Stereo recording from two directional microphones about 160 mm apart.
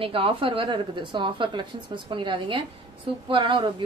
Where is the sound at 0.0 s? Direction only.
35° right (ahead or behind).